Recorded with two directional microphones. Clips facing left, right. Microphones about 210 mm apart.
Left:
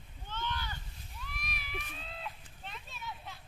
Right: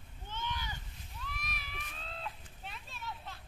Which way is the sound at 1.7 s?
5° left (ahead or behind).